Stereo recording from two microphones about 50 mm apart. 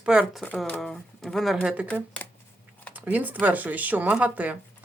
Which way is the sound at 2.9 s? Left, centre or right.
Right.